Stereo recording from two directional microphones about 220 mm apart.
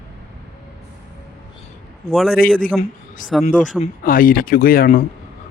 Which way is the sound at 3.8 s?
40° left (ahead or behind).